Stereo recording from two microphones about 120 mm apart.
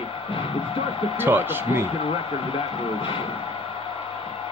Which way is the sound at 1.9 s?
50° left (ahead or behind).